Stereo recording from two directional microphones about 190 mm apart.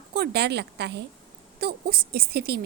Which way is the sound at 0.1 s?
60° right (ahead or behind).